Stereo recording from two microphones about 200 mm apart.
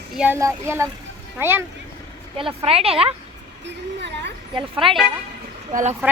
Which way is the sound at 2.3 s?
30° right (ahead or behind).